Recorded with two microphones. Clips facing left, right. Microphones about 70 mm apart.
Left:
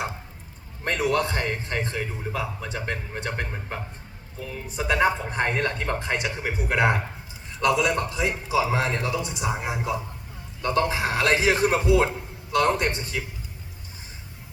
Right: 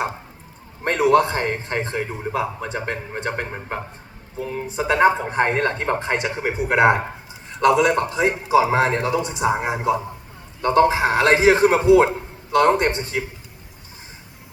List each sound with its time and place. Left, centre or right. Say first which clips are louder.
1.0 s a man's voice: right 8 dB; right